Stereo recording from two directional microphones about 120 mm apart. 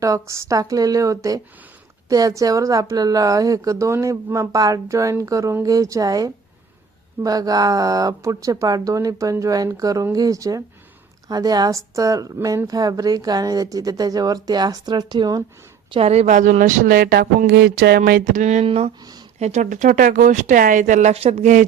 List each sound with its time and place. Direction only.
0.0 s a woman's voice: 25° right (ahead or behind)
15.9 s speech: 55° right (ahead or behind); by 16.8 s 90° right
18.3 s speech: 85° right
18.6 s speech: 55° right (ahead or behind)
19.4 s speech: 70° right (ahead or behind); by 21.7 s 90° right